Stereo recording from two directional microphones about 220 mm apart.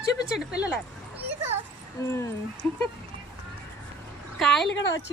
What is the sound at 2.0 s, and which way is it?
Speech, 15° left (ahead or behind).